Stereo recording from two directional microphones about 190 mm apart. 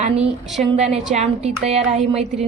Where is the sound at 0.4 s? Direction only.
Centre (ahead or behind).